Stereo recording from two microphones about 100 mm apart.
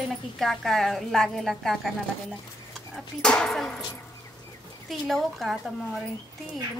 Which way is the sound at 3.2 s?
10° left (ahead or behind).